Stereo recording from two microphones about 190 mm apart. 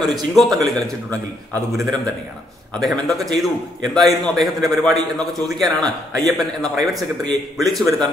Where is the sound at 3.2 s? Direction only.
Centre (ahead or behind).